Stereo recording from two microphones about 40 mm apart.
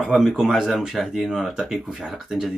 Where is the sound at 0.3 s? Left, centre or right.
Centre.